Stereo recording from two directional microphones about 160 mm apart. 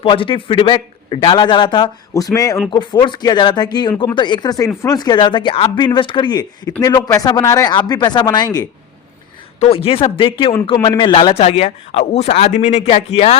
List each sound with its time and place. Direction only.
0.0 s a man's voice: 35° left (ahead or behind)
9.6 s a man's voice: 35° left (ahead or behind)